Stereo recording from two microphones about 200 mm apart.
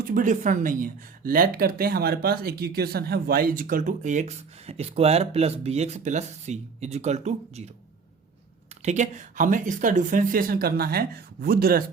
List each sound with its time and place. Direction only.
0.0 s speech: 40° right (ahead or behind)
8.8 s speech: 35° right (ahead or behind)